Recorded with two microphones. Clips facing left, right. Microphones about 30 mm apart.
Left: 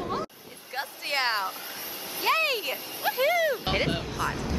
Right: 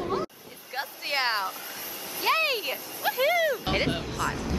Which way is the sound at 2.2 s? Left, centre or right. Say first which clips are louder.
Even; centre.